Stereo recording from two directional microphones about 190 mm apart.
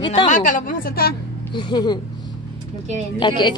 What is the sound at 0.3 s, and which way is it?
Speech, 45° left (ahead or behind).